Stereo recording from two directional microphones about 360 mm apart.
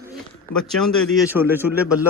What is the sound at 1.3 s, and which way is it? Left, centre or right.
Speech, centre.